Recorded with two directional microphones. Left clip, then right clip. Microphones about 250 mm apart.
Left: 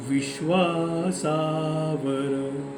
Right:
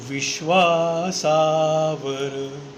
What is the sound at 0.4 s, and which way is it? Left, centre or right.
Singing, centre.